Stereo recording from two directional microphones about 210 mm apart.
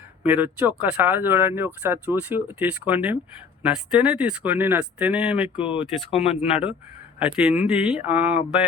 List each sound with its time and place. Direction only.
0.2 s speech: 10° right (ahead or behind)
5.6 s speech: 25° left (ahead or behind)
7.2 s speech: 5° right (ahead or behind)